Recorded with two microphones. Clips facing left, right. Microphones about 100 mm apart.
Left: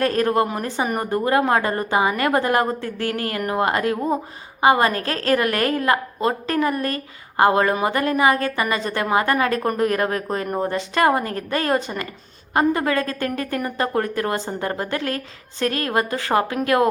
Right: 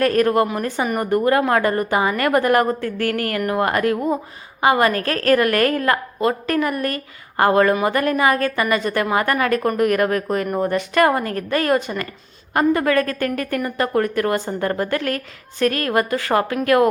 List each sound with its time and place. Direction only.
0.0 s a woman's voice: 25° left (ahead or behind)